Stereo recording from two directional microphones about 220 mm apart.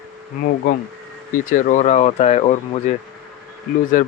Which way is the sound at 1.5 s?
35° left (ahead or behind).